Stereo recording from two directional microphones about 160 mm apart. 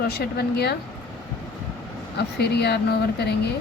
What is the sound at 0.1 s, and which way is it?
Speech, 80° left.